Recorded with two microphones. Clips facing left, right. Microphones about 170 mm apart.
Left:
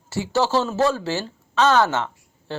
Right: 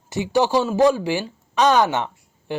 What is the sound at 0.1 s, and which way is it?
A woman's voice, 15° right (ahead or behind).